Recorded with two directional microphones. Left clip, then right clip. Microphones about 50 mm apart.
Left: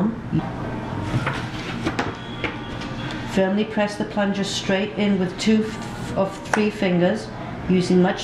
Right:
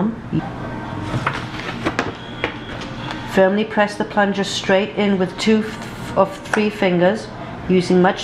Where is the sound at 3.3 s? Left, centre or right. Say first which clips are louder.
Right 7 dB; right.